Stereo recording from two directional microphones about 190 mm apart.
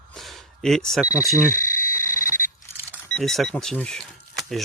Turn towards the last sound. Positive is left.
turn(degrees=0)  # may be behind; listen again after turning